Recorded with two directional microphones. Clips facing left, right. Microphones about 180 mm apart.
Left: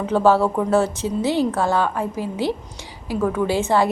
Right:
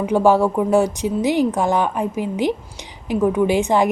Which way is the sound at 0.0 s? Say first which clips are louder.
Right 2 dB; 15° right (ahead or behind).